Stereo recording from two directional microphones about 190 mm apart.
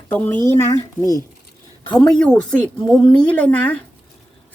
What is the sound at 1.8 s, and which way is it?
A woman's voice, 5° left (ahead or behind).